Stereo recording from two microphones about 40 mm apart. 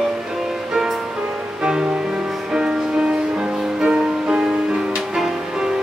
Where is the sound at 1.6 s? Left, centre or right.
Right.